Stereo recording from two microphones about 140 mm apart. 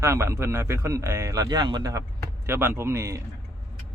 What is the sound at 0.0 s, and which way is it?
A man's voice, 20° right (ahead or behind).